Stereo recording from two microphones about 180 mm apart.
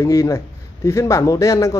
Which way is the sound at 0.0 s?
20° left (ahead or behind).